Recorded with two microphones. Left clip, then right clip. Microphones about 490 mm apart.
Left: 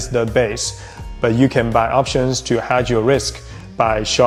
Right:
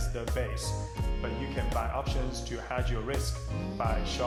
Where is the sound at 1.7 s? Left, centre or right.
Left.